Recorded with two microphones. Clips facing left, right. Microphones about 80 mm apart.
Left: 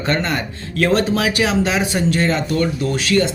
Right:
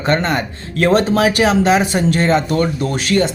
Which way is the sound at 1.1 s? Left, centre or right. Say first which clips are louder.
Right 4 dB; right.